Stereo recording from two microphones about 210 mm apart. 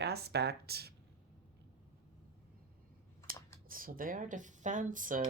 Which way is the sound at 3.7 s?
40° right (ahead or behind).